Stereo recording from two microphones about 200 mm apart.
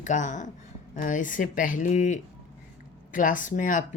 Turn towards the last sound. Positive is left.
turn(degrees=40)  # may be behind; listen again after turning